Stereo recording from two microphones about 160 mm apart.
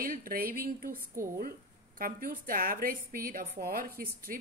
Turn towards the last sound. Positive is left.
turn(degrees=-65)  # may be behind; listen again after turning